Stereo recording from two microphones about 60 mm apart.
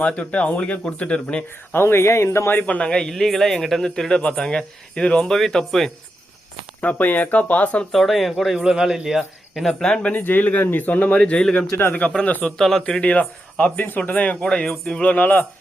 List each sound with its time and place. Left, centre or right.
0.0 s speech: centre
1.7 s speech: left
2.6 s speech: centre
3.1 s a man's voice: centre
6.8 s speech: left
7.9 s speech: centre
9.6 s a man's voice: centre
10.0 s speech: left
12.5 s speech: centre
13.0 s speech: left
14.4 s a man's voice: centre
15.0 s speech: left